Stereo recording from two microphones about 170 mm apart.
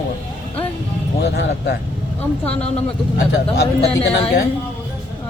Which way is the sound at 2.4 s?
5° left (ahead or behind).